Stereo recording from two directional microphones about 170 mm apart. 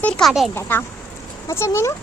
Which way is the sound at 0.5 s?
15° left (ahead or behind).